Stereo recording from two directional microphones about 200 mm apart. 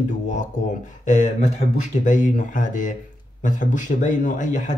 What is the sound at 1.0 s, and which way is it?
Speech, 40° left (ahead or behind).